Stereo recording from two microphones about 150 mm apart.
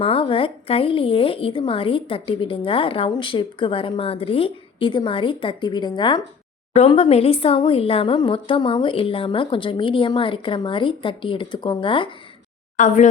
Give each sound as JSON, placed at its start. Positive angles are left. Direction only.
{"t": 0.0, "sound": "speech", "side_deg": 40}
{"t": 12.7, "sound": "speech", "side_deg": 55}